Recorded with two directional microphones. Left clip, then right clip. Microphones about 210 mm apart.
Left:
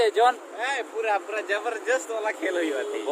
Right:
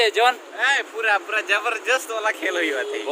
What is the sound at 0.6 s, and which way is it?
Speech, 10° left (ahead or behind).